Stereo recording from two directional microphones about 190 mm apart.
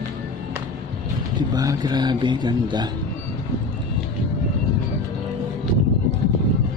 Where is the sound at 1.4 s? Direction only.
20° right (ahead or behind).